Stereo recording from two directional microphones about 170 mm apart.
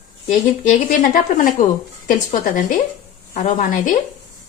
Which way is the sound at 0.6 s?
55° left (ahead or behind).